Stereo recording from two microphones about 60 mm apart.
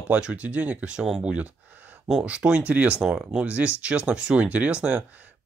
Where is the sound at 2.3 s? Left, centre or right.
Centre.